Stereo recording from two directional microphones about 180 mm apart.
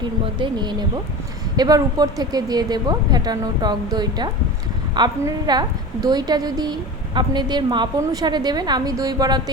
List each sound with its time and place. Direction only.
0.0 s a woman's voice: 25° right (ahead or behind)